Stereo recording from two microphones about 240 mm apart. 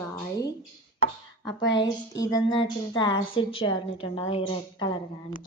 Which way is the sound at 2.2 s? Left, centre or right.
Centre.